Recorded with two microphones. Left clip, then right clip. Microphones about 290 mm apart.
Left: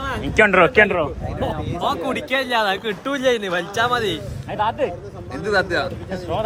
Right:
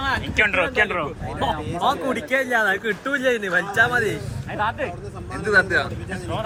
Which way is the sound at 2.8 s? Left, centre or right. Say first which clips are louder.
Left 1 dB; left.